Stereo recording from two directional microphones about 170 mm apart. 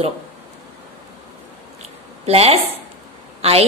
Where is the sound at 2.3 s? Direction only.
35° right (ahead or behind).